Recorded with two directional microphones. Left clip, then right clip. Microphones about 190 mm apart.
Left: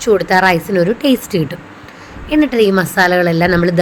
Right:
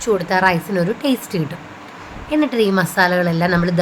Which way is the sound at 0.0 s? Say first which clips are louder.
Left 5 dB; 15° left (ahead or behind).